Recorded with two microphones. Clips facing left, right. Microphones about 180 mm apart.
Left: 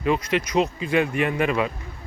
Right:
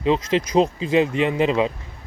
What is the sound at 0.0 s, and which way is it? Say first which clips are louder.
Speech: right 3 dB; 25° right (ahead or behind).